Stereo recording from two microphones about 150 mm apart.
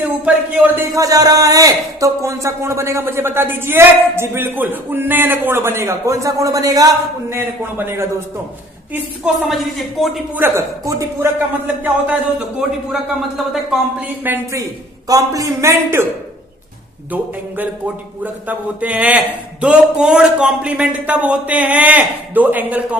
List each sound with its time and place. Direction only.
0.5 s speech: 20° right (ahead or behind)
8.9 s a woman's voice: 5° right (ahead or behind)
10.3 s speech: 15° right (ahead or behind)
12.9 s a woman's voice: centre (ahead or behind)
14.3 s a man's voice: 20° right (ahead or behind)
18.2 s speech: 10° right (ahead or behind)